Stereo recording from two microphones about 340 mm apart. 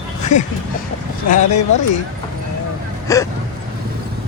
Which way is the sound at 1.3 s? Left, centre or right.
Left.